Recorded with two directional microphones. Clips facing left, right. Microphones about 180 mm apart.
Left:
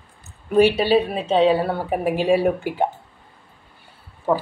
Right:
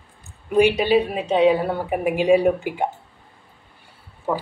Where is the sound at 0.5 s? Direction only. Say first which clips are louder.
Left 1 dB; 15° right (ahead or behind).